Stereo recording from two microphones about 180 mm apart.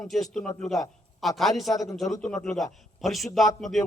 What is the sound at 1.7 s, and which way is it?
Speech, 20° left (ahead or behind).